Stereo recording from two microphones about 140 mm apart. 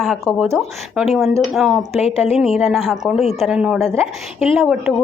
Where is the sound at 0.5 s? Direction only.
Centre (ahead or behind).